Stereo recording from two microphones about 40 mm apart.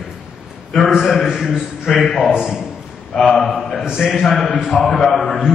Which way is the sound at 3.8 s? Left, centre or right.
Centre.